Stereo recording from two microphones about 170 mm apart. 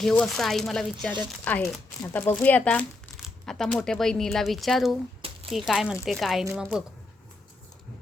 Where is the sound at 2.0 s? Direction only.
15° left (ahead or behind); by 6.9 s 5° right (ahead or behind).